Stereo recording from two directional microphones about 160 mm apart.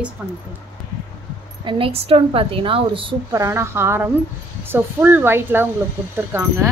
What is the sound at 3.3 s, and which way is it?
A woman's voice, 15° right (ahead or behind).